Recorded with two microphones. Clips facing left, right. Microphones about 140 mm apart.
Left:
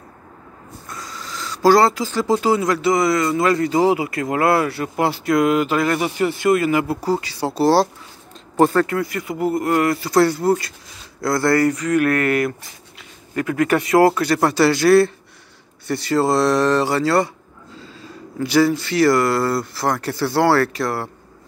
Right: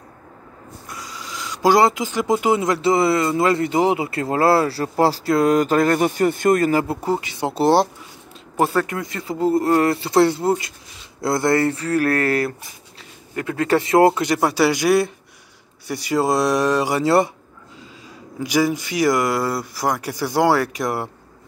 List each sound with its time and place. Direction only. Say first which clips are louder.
0.8 s speech: left 1 dB; 15° right (ahead or behind); by 7.0 s 35° right (ahead or behind)
7.0 s speech: left 1 dB; 20° right (ahead or behind)
18.4 s speech: left 3 dB; 15° right (ahead or behind)